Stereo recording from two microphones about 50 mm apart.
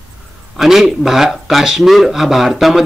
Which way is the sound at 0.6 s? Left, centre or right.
Centre.